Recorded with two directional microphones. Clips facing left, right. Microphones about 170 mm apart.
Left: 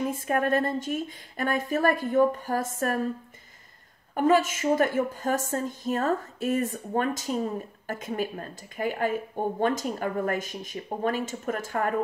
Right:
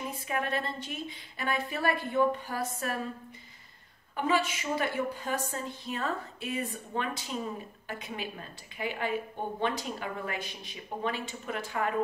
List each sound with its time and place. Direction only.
0.1 s a woman's voice: 45° left (ahead or behind)
4.1 s a woman's voice: 45° left (ahead or behind)